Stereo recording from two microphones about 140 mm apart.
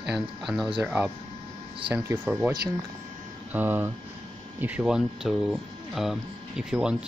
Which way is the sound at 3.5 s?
15° right (ahead or behind).